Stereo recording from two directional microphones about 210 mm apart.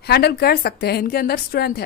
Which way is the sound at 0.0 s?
50° left (ahead or behind).